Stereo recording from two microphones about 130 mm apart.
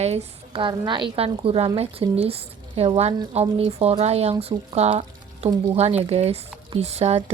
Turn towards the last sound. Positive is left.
turn(degrees=-55)  # may be behind; listen again after turning